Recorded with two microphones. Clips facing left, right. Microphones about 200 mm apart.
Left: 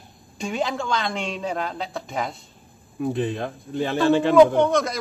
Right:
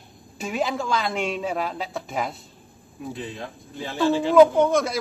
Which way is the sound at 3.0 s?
60° left (ahead or behind).